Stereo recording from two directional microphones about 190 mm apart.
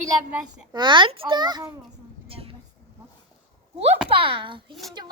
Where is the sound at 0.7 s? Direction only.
25° right (ahead or behind).